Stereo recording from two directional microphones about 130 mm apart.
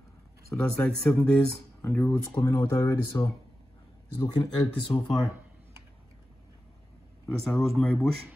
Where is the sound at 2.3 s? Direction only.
25° left (ahead or behind).